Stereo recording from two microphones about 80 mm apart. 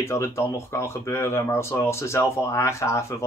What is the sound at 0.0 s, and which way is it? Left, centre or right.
Speech, left.